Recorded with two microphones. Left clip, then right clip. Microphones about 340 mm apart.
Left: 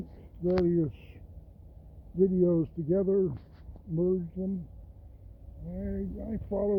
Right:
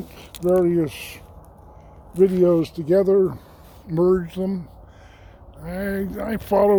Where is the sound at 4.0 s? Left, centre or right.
Right.